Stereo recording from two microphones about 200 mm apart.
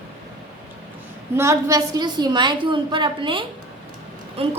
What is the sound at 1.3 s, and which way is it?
A woman's voice, 15° right (ahead or behind).